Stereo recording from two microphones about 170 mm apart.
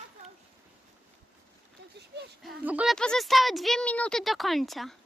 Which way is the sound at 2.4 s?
5° right (ahead or behind).